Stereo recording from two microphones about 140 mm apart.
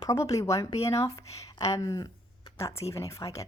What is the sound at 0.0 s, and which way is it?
A woman's voice, 25° left (ahead or behind).